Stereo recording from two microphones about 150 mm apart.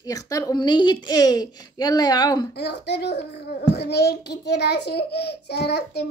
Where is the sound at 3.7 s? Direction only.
90° left.